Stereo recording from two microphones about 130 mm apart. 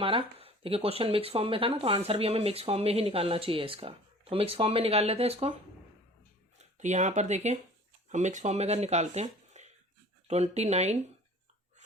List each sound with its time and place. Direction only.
0.0 s speech: 45° right (ahead or behind)
6.6 s speech: 65° right (ahead or behind)